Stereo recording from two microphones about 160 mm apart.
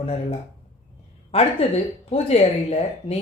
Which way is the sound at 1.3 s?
40° left (ahead or behind).